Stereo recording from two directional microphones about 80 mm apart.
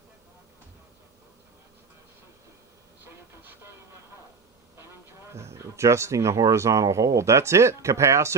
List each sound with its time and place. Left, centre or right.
5.3 s speech: right